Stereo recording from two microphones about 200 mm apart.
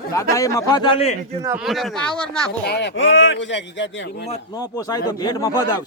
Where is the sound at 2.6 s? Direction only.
60° left (ahead or behind).